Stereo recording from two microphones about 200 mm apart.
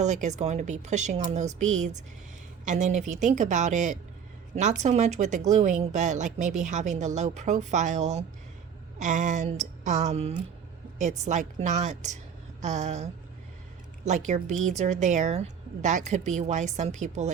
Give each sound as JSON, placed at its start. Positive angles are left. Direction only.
{"t": 0.0, "sound": "a woman's voice", "side_deg": -35}